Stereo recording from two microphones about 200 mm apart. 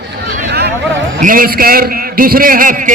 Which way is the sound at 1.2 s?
45° right (ahead or behind).